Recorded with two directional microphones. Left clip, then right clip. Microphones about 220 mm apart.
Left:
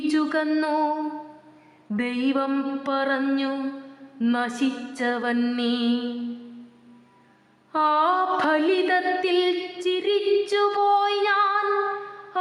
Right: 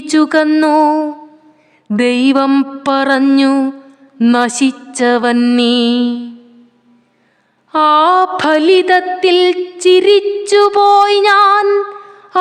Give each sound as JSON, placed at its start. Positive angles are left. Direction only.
{"t": 0.0, "sound": "a sound", "side_deg": -45}
{"t": 1.9, "sound": "music", "side_deg": -45}
{"t": 7.7, "sound": "music", "side_deg": -45}